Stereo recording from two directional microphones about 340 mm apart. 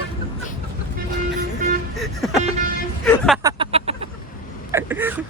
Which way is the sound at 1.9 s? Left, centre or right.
Centre.